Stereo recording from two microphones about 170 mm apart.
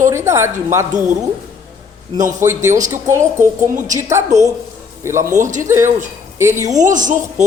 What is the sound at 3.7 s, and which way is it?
Speech, 50° right (ahead or behind).